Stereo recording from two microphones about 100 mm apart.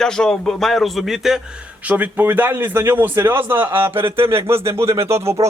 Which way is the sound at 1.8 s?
15° right (ahead or behind).